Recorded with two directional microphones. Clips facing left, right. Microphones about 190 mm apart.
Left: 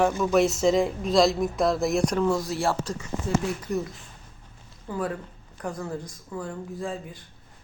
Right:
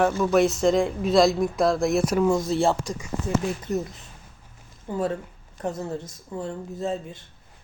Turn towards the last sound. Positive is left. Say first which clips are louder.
# right 3 dB
turn(degrees=-25)  # may be behind; listen again after turning